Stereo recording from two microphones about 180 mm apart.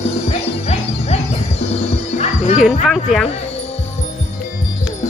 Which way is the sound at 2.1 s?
40° left (ahead or behind).